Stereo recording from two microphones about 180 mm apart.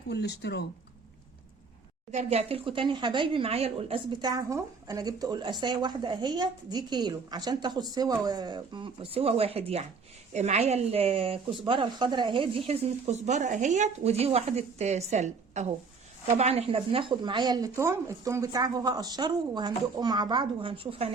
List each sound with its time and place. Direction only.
0.1 s speech: 70° left (ahead or behind)
2.1 s speech: 35° right (ahead or behind)